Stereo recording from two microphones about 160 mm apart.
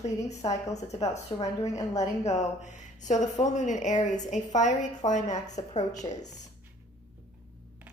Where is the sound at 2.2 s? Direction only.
45° left (ahead or behind).